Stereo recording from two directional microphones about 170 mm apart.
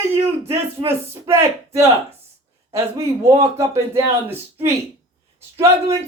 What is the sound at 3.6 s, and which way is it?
Speech, 15° right (ahead or behind).